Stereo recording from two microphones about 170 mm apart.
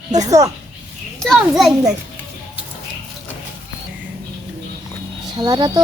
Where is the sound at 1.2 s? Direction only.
Centre (ahead or behind).